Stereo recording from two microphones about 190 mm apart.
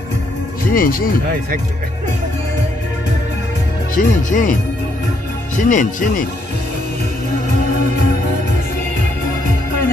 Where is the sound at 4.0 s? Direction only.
45° left (ahead or behind).